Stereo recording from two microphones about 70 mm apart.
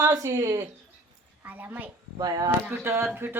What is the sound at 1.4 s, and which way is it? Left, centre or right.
Speech, right.